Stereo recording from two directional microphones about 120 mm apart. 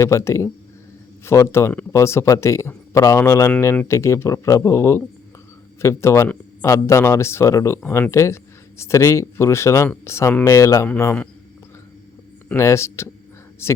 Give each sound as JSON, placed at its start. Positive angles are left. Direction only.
{"t": 0.0, "sound": "speech", "side_deg": 25}
{"t": 10.8, "sound": "a man's voice", "side_deg": 15}
{"t": 12.5, "sound": "speech", "side_deg": 25}